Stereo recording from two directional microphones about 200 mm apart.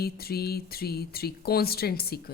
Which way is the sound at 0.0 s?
50° left (ahead or behind).